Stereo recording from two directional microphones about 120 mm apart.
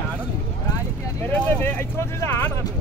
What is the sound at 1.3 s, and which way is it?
Vehicle, 20° left (ahead or behind).